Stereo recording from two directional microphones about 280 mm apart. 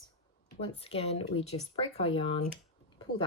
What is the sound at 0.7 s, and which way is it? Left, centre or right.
Speech, left.